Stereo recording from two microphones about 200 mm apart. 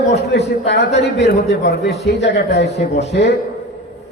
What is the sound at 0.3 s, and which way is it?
A man's voice, 55° left (ahead or behind).